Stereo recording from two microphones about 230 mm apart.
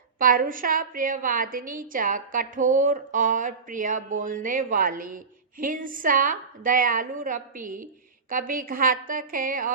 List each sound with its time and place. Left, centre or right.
0.2 s a woman's voice: right